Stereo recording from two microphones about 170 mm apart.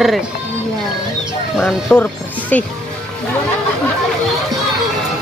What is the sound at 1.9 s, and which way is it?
Speech, 15° left (ahead or behind).